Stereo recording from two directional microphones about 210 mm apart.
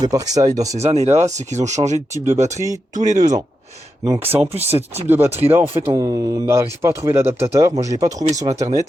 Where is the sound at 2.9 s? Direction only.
35° right (ahead or behind).